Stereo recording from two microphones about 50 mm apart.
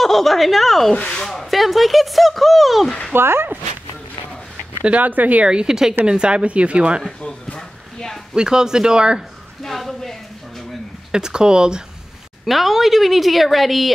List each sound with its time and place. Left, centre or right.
0.0 s speech: centre
3.1 s speech: right
4.8 s speech: right
5.5 s speech: centre
7.5 s a sound: centre
8.4 s speech: centre
9.6 s speech: centre
11.1 s speech: centre
12.4 s speech: centre